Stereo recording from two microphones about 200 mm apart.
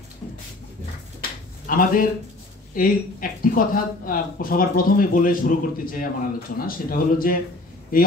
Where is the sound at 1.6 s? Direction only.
45° left (ahead or behind).